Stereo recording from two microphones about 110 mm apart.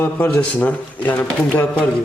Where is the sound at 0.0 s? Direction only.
15° left (ahead or behind).